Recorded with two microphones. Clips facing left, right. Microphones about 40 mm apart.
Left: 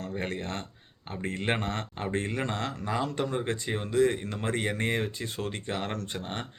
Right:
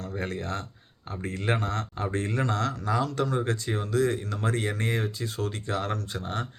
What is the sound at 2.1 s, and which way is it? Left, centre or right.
Speech, left.